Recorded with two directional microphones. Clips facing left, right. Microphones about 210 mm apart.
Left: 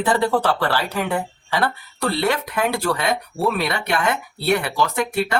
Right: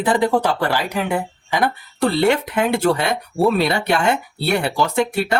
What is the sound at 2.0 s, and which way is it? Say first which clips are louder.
Speech: right 5 dB; 25° right (ahead or behind).